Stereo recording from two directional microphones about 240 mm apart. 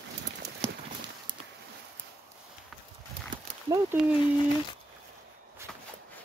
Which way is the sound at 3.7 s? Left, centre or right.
Centre.